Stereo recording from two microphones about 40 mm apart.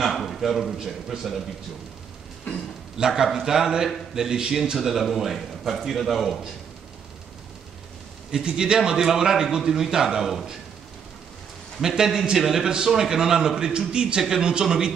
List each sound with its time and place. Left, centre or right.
0.0 s a man's voice: centre
3.0 s a man's voice: centre
4.7 s a man's voice: centre
8.5 s a man's voice: right
11.8 s a man's voice: centre